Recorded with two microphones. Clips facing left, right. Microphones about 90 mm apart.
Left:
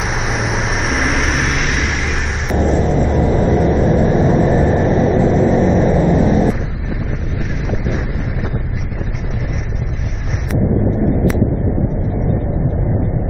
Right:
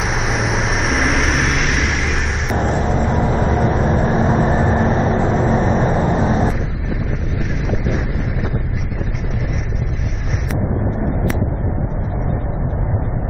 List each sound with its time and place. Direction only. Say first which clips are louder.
0.3 s vehicle: even; centre (ahead or behind)
2.8 s vehicle: left 3 dB; 55° right (ahead or behind)
3.2 s vehicle: left 3 dB; 45° right (ahead or behind)